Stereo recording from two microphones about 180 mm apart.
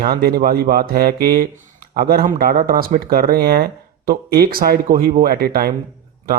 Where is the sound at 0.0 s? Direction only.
55° right (ahead or behind).